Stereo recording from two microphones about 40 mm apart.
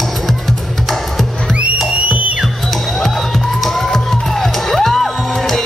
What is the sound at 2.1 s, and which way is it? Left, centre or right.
Music, right.